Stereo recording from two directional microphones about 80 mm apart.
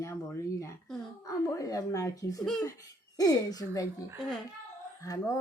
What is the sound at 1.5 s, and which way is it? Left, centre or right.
Speech, left.